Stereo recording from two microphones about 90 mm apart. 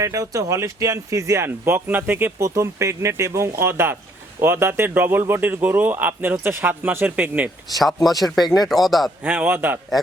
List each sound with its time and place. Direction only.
0.0 s speech: 35° right (ahead or behind); by 7.5 s 20° right (ahead or behind)
8.0 s speech: centre (ahead or behind)
9.2 s speech: 20° right (ahead or behind)